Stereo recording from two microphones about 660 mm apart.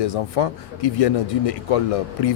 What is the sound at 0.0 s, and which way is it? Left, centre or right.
Speech, left.